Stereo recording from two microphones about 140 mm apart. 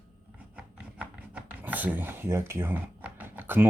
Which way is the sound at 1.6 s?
10° right (ahead or behind).